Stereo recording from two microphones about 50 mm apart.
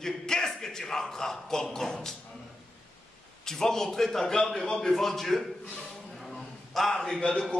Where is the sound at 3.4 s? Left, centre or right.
Centre.